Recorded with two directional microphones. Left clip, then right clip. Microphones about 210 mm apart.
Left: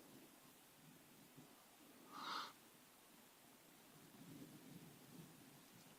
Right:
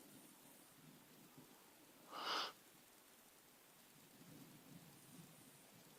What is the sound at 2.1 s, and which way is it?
Owl, 30° right (ahead or behind).